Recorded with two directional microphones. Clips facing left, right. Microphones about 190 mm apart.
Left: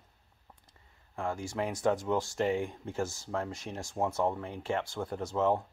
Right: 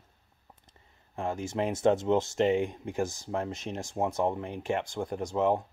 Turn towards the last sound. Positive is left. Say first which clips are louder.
# right 2 dB
turn(degrees=-15)  # may be behind; listen again after turning